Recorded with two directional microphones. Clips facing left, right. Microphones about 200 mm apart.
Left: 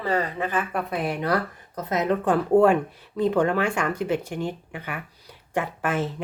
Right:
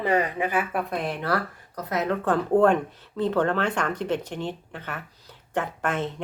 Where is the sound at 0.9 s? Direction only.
10° left (ahead or behind).